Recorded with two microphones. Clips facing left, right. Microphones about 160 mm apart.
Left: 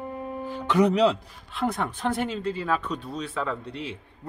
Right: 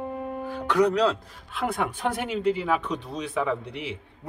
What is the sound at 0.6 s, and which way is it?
Speech, 25° left (ahead or behind).